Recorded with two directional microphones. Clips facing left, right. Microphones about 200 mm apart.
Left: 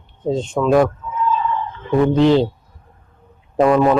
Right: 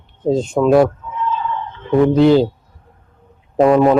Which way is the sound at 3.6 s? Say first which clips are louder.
Right 2 dB; 20° right (ahead or behind).